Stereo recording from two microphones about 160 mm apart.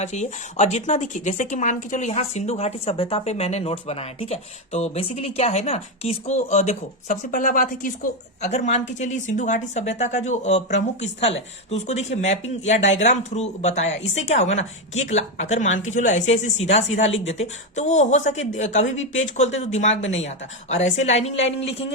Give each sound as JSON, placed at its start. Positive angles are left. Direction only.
{"t": 0.0, "sound": "speech", "side_deg": 45}
{"t": 8.4, "sound": "speech", "side_deg": 45}